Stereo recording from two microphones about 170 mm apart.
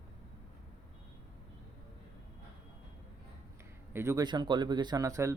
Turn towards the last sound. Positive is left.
turn(degrees=-20)  # may be behind; listen again after turning